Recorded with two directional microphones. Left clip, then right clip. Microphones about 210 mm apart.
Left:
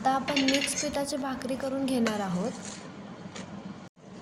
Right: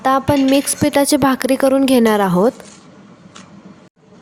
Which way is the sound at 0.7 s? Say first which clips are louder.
Right 16 dB; 45° right (ahead or behind).